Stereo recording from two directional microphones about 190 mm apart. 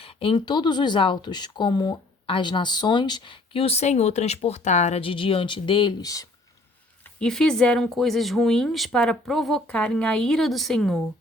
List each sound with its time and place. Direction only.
0.0 s speech: 30° left (ahead or behind)
7.2 s speech: 5° left (ahead or behind)